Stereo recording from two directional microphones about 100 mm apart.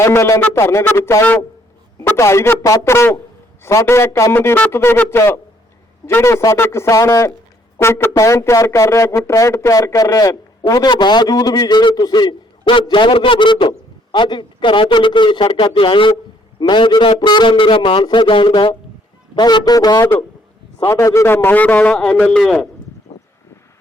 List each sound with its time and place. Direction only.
0.0 s a man's voice: 30° left (ahead or behind); by 17.2 s 55° left (ahead or behind)
17.2 s speech: 45° left (ahead or behind)
20.8 s a man's voice: 30° left (ahead or behind); by 22.7 s 5° left (ahead or behind)
23.1 s vehicle: 70° left (ahead or behind)